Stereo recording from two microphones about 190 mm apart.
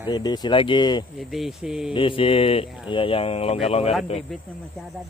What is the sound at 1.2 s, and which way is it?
Speech, centre (ahead or behind).